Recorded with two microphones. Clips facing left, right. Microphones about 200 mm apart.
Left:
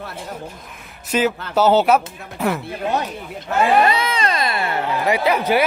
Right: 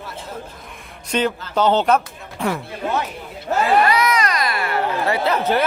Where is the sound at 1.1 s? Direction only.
5° left (ahead or behind).